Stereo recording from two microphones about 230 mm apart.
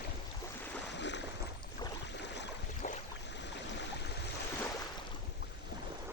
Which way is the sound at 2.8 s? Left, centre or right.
Left.